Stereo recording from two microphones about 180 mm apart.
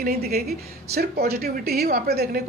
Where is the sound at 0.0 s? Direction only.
55° right (ahead or behind).